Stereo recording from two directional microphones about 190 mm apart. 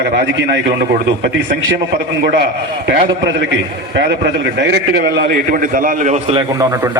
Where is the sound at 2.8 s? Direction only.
60° right (ahead or behind); by 6.2 s 40° right (ahead or behind).